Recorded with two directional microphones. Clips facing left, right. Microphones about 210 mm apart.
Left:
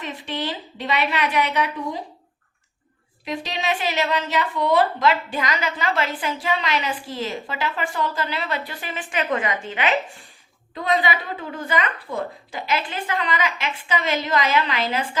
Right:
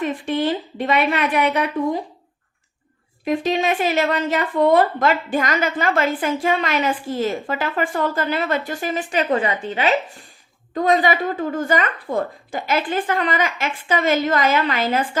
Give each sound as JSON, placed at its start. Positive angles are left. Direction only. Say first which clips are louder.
{"t": 0.0, "sound": "a woman's voice", "louder": "right 8 dB", "side_deg": -50}
{"t": 3.2, "sound": "a woman's voice", "louder": "right 7 dB", "side_deg": -50}